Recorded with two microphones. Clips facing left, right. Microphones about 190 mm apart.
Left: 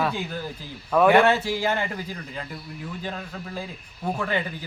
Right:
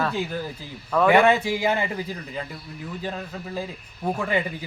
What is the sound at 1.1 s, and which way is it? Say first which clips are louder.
A man's voice: right 3 dB; 10° right (ahead or behind).